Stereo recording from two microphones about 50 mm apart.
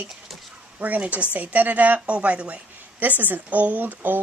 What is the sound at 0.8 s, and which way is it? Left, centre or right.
Speech, right.